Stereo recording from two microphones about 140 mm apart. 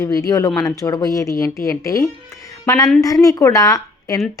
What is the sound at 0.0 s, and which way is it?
A woman's voice, 25° left (ahead or behind).